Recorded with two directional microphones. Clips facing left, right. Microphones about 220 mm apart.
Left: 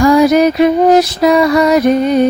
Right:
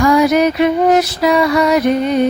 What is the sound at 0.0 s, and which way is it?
Music, 35° left (ahead or behind).